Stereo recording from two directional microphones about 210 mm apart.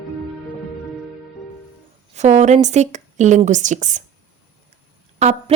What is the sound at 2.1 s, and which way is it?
A woman's voice, 35° right (ahead or behind).